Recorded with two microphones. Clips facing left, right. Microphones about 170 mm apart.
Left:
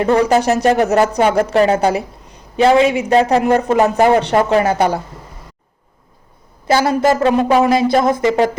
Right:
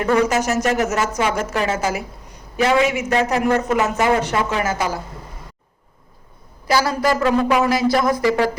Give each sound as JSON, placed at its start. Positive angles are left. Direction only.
{"t": 0.0, "sound": "a woman's voice", "side_deg": 35}
{"t": 4.7, "sound": "a woman's voice", "side_deg": 60}
{"t": 6.7, "sound": "speech", "side_deg": 25}